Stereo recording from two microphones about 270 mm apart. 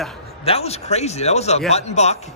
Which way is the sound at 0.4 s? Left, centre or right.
Left.